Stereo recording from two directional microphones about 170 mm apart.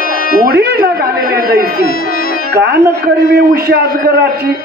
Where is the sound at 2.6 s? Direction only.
70° right (ahead or behind).